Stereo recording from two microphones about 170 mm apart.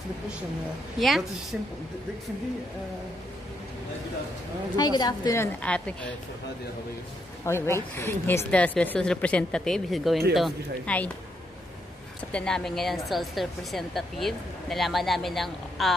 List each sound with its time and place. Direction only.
0.9 s a woman's voice: centre (ahead or behind)
4.7 s a woman's voice: 25° left (ahead or behind); by 5.9 s 5° left (ahead or behind)
7.4 s a woman's voice: 15° left (ahead or behind)
12.3 s a woman's voice: 5° left (ahead or behind)